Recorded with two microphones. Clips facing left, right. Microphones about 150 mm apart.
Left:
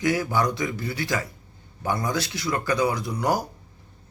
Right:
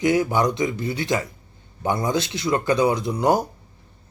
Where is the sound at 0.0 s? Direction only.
20° right (ahead or behind).